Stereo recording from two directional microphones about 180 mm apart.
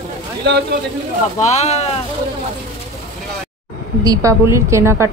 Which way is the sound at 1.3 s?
40° left (ahead or behind).